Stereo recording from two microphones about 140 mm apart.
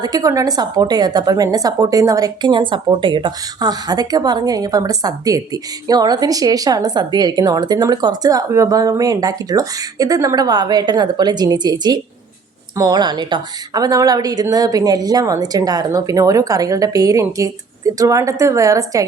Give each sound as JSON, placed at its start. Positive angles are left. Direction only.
{"t": 0.0, "sound": "a woman's voice", "side_deg": -25}